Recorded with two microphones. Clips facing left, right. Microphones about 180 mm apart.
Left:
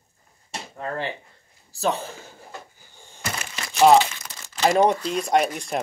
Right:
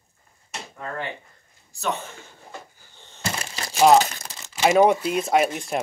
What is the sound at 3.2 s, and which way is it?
Crumpling, 30° right (ahead or behind).